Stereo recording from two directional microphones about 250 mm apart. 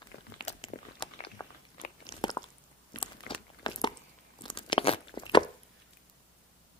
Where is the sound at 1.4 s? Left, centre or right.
Centre.